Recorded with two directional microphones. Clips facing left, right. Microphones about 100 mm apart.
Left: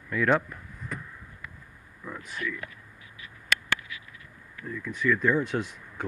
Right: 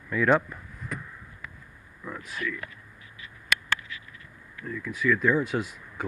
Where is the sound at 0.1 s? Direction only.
20° right (ahead or behind).